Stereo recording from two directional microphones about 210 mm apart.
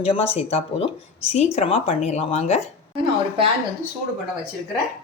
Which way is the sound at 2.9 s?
25° right (ahead or behind).